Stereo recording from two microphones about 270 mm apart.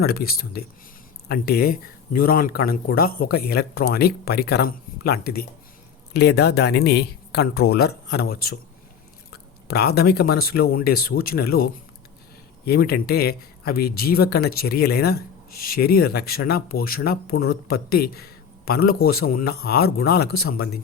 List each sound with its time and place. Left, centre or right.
0.0 s speech: left